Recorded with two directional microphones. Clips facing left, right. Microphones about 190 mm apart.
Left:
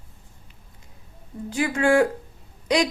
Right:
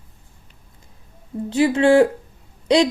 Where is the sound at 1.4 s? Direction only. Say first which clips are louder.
Right 6 dB; 25° right (ahead or behind).